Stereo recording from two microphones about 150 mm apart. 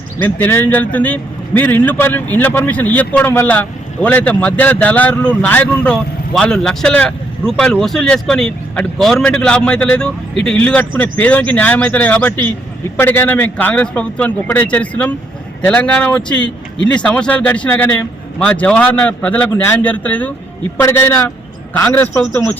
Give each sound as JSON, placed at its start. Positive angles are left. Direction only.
{"t": 0.2, "sound": "a man's voice", "side_deg": 10}